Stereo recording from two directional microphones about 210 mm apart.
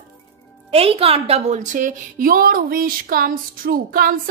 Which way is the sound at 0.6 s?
25° right (ahead or behind).